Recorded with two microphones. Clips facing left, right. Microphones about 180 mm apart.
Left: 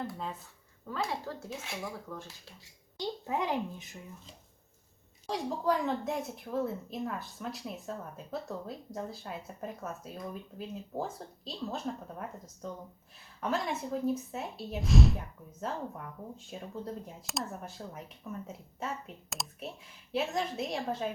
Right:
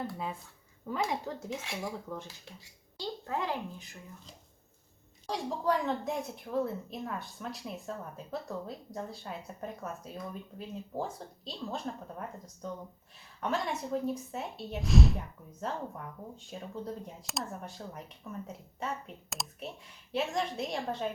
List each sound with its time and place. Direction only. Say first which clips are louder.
0.9 s speech: right 2 dB; 15° right (ahead or behind)
3.0 s speech: left 2 dB; 15° left (ahead or behind)
5.2 s a woman's voice: even; centre (ahead or behind)